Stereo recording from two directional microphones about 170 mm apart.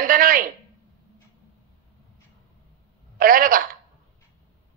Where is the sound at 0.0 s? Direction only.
55° right (ahead or behind).